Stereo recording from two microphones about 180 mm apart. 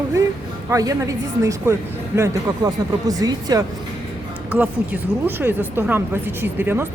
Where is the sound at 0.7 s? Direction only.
20° right (ahead or behind).